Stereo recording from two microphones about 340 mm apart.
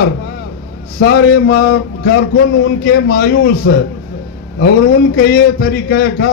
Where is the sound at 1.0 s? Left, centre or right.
Left.